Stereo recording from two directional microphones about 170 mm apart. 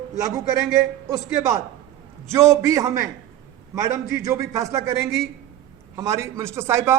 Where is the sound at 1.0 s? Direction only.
20° right (ahead or behind).